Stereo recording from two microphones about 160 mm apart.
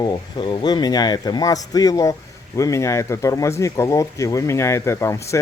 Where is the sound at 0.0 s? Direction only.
30° left (ahead or behind).